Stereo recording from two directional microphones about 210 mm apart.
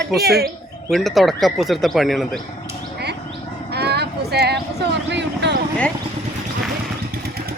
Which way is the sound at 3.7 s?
50° right (ahead or behind).